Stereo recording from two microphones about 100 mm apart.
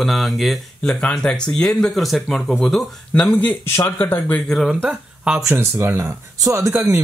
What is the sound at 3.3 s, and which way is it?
Speech, 15° left (ahead or behind).